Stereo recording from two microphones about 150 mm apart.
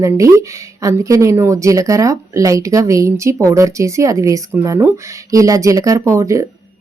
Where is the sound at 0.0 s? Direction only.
20° right (ahead or behind).